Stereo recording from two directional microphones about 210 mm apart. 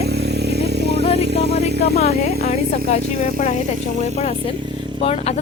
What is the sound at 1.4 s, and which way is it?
Music, 50° right (ahead or behind).